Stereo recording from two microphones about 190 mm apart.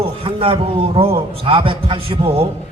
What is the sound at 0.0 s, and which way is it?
A man's voice, 30° right (ahead or behind).